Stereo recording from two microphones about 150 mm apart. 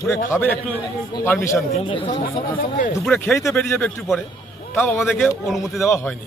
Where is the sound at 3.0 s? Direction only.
5° left (ahead or behind).